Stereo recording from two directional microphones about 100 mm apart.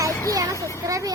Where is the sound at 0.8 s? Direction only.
35° right (ahead or behind).